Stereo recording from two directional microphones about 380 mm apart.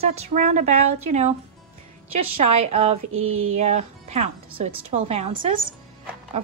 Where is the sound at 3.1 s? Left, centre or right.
Right.